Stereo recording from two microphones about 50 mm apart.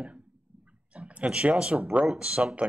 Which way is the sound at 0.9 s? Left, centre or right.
Right.